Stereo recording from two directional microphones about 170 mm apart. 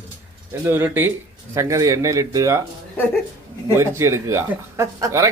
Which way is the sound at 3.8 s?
15° right (ahead or behind).